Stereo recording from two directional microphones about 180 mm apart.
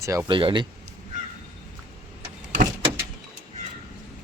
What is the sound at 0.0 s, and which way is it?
Speech, 15° right (ahead or behind).